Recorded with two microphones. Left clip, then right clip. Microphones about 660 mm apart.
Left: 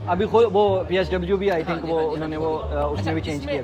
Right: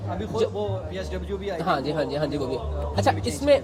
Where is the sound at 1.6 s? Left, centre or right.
Right.